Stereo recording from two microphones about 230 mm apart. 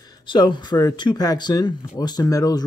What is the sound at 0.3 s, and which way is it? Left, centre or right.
Speech, centre.